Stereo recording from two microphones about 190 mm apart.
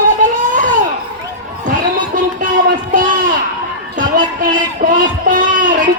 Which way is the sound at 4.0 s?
45° right (ahead or behind).